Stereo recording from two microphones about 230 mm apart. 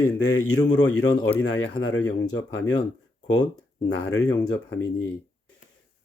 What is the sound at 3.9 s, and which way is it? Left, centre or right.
Speech, left.